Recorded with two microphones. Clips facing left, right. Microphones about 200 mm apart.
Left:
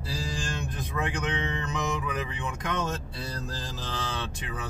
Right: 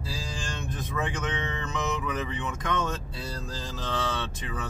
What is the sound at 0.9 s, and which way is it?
Speech, 15° left (ahead or behind).